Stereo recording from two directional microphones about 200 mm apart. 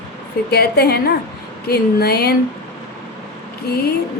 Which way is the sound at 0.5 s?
55° left (ahead or behind).